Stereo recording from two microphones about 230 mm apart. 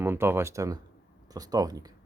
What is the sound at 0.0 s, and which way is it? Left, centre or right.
Speech, centre.